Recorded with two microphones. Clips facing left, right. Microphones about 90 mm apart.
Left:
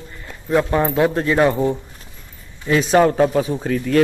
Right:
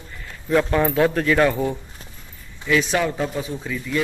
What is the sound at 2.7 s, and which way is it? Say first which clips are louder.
Speech: left 6 dB; 40° left (ahead or behind).